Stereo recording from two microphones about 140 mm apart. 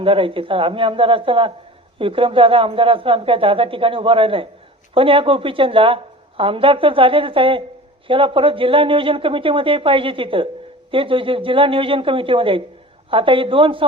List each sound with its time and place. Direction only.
0.0 s a woman's voice: 40° right (ahead or behind)